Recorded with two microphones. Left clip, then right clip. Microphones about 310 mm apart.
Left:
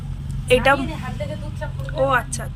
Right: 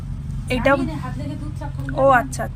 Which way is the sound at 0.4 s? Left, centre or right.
Centre.